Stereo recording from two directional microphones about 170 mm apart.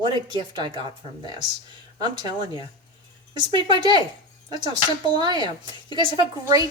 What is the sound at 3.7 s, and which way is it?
Speech, 25° right (ahead or behind).